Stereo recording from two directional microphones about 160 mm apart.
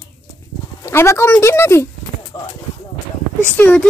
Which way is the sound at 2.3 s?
25° left (ahead or behind).